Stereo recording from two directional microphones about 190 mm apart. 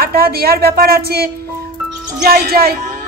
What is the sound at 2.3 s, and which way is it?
Speech, 50° right (ahead or behind).